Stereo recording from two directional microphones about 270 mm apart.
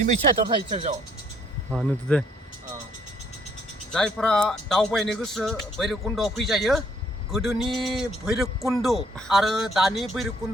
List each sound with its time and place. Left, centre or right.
0.0 s speech: right
1.7 s a man's voice: centre
3.9 s a man's voice: centre